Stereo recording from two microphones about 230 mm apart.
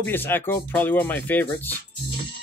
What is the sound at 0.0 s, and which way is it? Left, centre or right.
Speech, centre.